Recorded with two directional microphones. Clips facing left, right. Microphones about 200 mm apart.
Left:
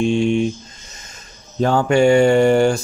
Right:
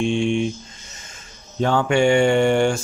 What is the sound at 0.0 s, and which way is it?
Speech, 40° left (ahead or behind).